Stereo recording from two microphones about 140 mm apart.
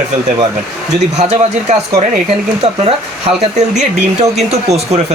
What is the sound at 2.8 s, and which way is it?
Speech, 45° right (ahead or behind).